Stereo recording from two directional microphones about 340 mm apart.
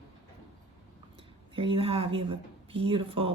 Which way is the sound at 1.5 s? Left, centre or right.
Centre.